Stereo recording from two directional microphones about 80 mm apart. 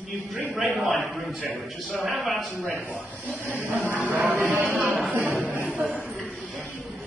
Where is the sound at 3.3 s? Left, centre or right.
Centre.